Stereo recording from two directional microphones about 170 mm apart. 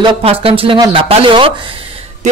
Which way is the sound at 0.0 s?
35° right (ahead or behind).